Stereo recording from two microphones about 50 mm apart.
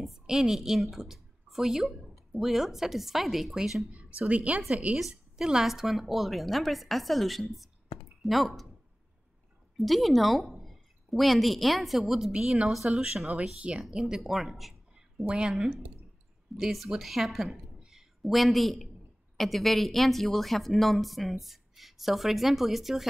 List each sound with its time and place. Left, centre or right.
0.0 s a woman's voice: centre
3.9 s a woman's voice: right
4.9 s speech: centre
9.8 s a woman's voice: centre; by 13.8 s right
13.8 s speech: centre
16.5 s speech: centre